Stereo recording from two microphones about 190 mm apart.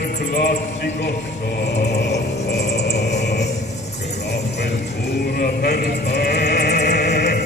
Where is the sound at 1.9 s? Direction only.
60° left (ahead or behind).